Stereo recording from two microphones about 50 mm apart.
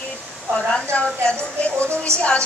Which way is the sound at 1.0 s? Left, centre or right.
Left.